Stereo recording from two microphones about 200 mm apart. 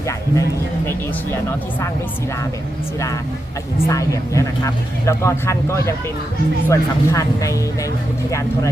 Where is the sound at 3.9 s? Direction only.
15° left (ahead or behind).